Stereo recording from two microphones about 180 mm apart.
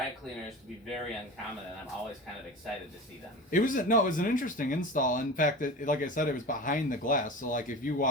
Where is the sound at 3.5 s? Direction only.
45° left (ahead or behind).